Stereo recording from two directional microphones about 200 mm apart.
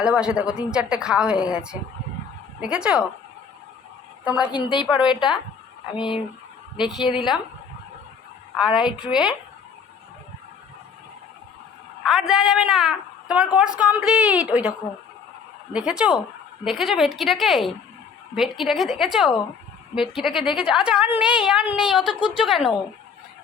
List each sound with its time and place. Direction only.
0.0 s speech: 5° right (ahead or behind)
4.5 s a woman's voice: 25° left (ahead or behind)
6.7 s speech: 5° right (ahead or behind)
8.5 s speech: 5° right (ahead or behind)
12.0 s speech: centre (ahead or behind)
15.7 s speech: 5° right (ahead or behind)